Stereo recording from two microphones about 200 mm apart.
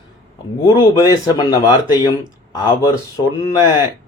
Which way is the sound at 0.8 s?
20° left (ahead or behind).